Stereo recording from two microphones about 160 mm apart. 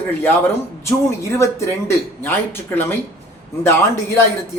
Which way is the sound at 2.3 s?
15° left (ahead or behind).